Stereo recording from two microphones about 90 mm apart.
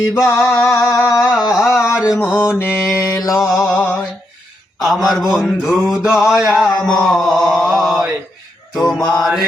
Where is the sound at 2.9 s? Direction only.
35° left (ahead or behind).